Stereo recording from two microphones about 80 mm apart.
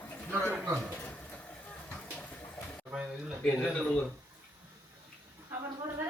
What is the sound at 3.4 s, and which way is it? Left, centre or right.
Speech, centre.